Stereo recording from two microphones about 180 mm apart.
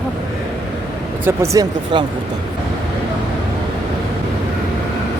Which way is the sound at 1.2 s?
15° right (ahead or behind).